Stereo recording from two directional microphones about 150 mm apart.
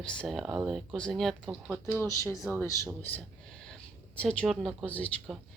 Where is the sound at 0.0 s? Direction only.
5° left (ahead or behind).